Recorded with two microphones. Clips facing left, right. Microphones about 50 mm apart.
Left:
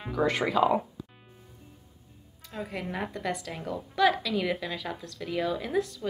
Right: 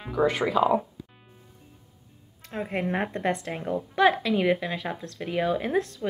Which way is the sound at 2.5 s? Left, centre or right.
Right.